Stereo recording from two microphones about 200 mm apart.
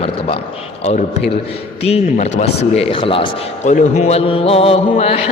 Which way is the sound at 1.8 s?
30° left (ahead or behind).